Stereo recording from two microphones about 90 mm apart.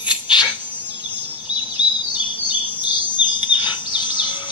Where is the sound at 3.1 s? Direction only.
60° left (ahead or behind).